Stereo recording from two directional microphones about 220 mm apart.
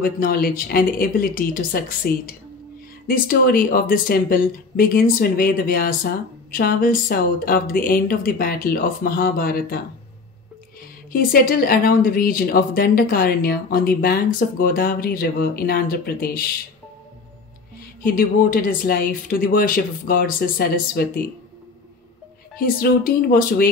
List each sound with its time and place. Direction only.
0.0 s speech: 45° left (ahead or behind)
11.1 s speech: 40° left (ahead or behind)
18.0 s speech: 40° left (ahead or behind)
22.6 s speech: 40° left (ahead or behind)